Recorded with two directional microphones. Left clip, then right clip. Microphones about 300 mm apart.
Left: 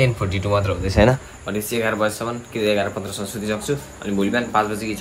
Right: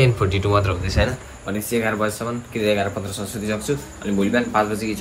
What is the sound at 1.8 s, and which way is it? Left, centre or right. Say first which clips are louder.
A man's voice: left 3 dB; centre.